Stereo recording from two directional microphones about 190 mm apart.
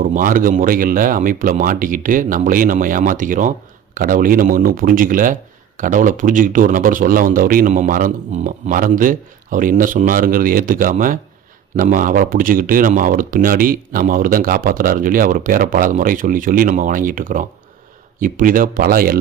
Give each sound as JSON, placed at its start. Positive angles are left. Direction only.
{"t": 0.0, "sound": "speech", "side_deg": -45}